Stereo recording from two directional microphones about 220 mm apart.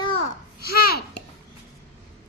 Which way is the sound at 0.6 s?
45° left (ahead or behind).